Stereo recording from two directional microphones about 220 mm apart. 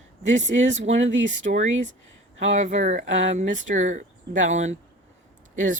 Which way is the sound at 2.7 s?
30° right (ahead or behind).